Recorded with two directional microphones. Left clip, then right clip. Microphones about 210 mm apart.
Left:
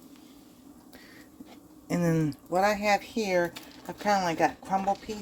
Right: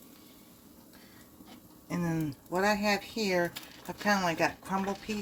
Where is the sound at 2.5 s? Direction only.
30° left (ahead or behind).